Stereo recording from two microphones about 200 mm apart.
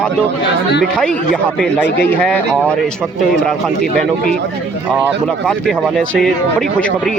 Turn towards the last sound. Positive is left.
turn(degrees=0)  # may be behind; listen again after turning